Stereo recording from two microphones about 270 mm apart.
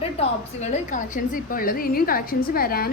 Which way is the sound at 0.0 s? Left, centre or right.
Left.